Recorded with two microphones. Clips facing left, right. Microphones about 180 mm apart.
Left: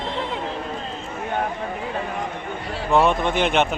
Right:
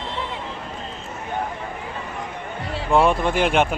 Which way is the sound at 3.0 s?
5° right (ahead or behind).